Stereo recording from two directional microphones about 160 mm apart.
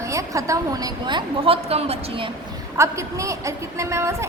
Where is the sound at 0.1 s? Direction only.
20° right (ahead or behind); by 2.3 s 35° right (ahead or behind).